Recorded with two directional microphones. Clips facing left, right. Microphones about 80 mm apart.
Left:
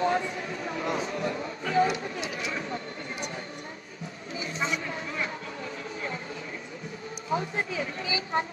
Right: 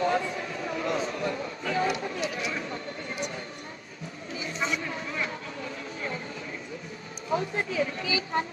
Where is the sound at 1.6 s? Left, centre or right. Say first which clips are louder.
Left 3 dB; left.